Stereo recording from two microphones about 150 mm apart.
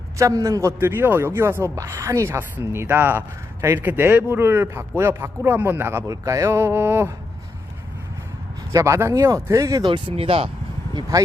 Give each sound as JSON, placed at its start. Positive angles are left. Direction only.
{"t": 0.2, "sound": "a man's voice", "side_deg": -20}
{"t": 8.7, "sound": "speech", "side_deg": -20}